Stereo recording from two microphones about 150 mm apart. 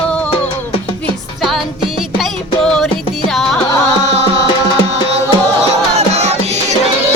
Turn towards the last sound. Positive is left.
turn(degrees=-45)  # may be behind; listen again after turning